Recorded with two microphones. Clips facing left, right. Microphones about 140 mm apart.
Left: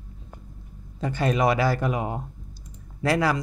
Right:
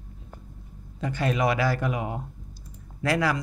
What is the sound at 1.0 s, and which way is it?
Speech, 35° left (ahead or behind).